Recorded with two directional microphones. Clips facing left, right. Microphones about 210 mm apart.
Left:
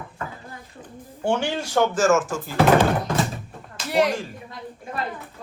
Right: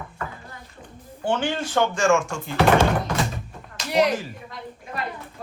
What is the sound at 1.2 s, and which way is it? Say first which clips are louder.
Speech: left 1 dB; 10° left (ahead or behind).